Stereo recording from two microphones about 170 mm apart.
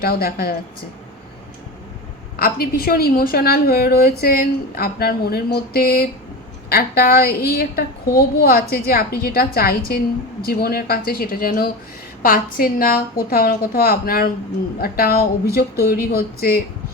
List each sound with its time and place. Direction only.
0.0 s a woman's voice: 60° left (ahead or behind)
2.3 s a woman's voice: 60° left (ahead or behind)